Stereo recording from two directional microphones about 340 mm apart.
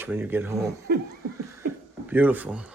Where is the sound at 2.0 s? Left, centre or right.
Centre.